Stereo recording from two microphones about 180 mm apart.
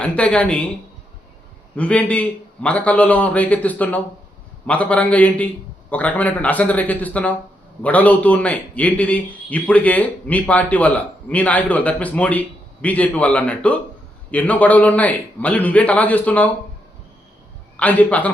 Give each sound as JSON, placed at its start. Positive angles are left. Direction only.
{"t": 0.0, "sound": "a man's voice", "side_deg": 5}
{"t": 1.7, "sound": "a man's voice", "side_deg": 5}
{"t": 17.7, "sound": "a man's voice", "side_deg": 10}